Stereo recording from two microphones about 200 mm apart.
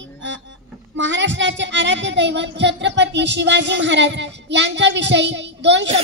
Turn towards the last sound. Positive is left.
turn(degrees=-60)  # may be behind; listen again after turning